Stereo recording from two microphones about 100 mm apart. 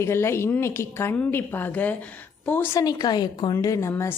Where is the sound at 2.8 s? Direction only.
40° left (ahead or behind).